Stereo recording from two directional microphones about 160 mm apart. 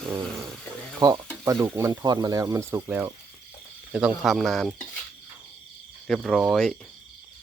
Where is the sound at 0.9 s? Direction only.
30° right (ahead or behind).